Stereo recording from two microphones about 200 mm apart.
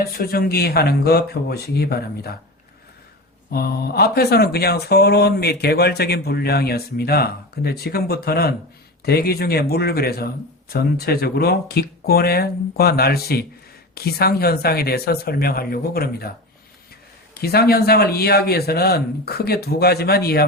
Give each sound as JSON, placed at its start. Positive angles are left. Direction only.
{"t": 0.0, "sound": "speech", "side_deg": 45}
{"t": 3.5, "sound": "speech", "side_deg": 50}
{"t": 17.3, "sound": "speech", "side_deg": 50}